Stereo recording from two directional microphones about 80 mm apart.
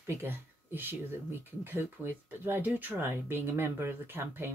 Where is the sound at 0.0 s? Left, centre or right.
Right.